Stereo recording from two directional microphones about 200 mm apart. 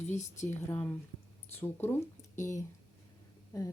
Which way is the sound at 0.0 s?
35° left (ahead or behind).